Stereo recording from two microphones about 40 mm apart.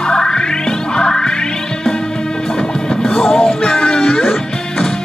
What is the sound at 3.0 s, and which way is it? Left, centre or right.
Music, centre.